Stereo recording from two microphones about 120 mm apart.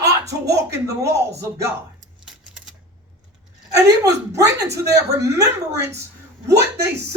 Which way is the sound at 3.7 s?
30° right (ahead or behind).